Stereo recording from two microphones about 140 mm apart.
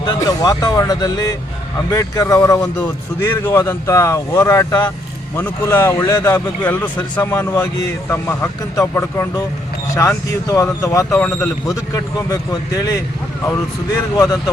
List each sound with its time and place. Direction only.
0.0 s speech: 25° left (ahead or behind)
3.6 s a man's voice: 20° left (ahead or behind)
11.2 s speech: 5° left (ahead or behind)
11.7 s speech: 25° left (ahead or behind)